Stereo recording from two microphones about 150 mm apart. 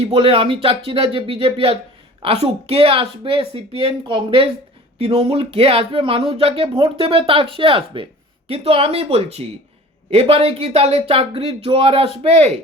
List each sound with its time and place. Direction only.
0.0 s speech: 40° right (ahead or behind)